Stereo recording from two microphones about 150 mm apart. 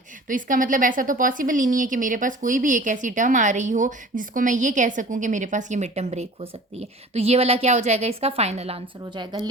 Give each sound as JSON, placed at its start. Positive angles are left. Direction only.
{"t": 0.3, "sound": "a woman's voice", "side_deg": -65}